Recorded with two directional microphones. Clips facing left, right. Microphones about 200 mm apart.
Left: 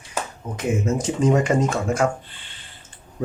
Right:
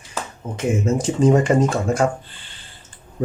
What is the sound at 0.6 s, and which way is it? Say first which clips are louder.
Speech: right 2 dB; 30° right (ahead or behind).